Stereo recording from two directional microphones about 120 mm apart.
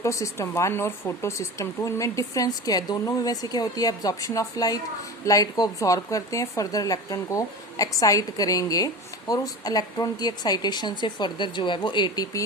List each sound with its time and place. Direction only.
0.0 s a woman's voice: 25° left (ahead or behind)